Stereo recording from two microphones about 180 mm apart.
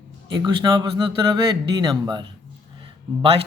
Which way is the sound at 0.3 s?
25° right (ahead or behind).